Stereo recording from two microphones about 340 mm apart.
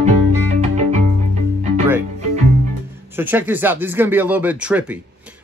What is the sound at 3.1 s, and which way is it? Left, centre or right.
Speech, centre.